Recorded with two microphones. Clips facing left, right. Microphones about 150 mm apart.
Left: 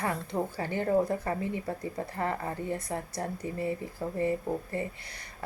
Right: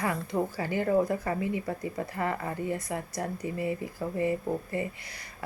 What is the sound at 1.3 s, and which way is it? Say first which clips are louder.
Speech: right 2 dB; 15° right (ahead or behind).